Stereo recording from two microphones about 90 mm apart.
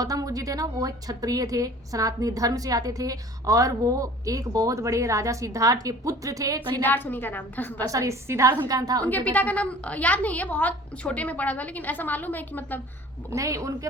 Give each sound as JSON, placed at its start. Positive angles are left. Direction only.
{"t": 0.0, "sound": "a woman's voice", "side_deg": -45}
{"t": 6.8, "sound": "a woman's voice", "side_deg": 20}
{"t": 7.9, "sound": "a woman's voice", "side_deg": -35}
{"t": 9.0, "sound": "a woman's voice", "side_deg": 20}
{"t": 13.3, "sound": "a woman's voice", "side_deg": -35}